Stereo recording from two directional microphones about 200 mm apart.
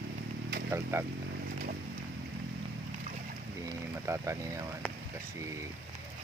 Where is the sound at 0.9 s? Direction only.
15° right (ahead or behind).